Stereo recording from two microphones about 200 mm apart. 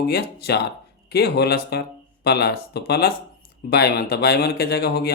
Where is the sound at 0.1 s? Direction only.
55° left (ahead or behind).